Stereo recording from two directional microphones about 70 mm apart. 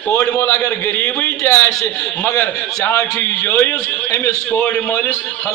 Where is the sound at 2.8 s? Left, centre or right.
Left.